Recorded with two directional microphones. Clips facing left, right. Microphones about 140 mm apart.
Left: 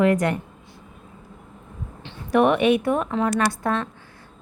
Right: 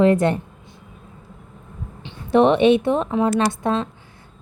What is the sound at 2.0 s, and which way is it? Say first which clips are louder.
A woman's voice: right 3 dB; 25° right (ahead or behind).